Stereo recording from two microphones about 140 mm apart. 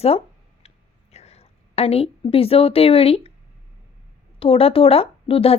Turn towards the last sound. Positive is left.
turn(degrees=40)  # may be behind; listen again after turning